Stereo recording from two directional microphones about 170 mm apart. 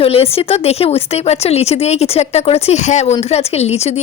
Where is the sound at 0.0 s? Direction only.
35° left (ahead or behind).